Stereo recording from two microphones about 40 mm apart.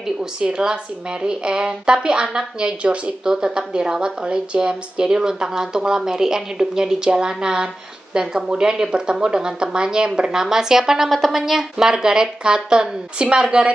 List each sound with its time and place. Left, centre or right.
0.2 s a woman's voice: centre
11.1 s speech: centre
11.4 s a woman's voice: centre